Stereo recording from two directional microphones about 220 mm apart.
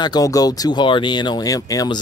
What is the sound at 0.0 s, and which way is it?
Speech, 15° left (ahead or behind).